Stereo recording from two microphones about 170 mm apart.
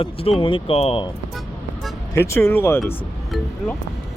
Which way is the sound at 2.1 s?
15° left (ahead or behind).